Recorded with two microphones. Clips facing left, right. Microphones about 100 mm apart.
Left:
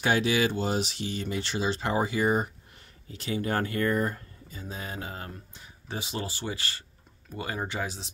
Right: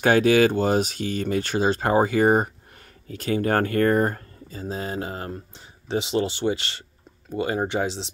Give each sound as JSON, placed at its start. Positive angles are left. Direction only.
{"t": 0.0, "sound": "speech", "side_deg": -50}